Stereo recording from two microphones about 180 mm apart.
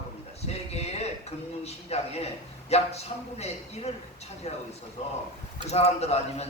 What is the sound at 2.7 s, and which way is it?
Speech, 35° left (ahead or behind).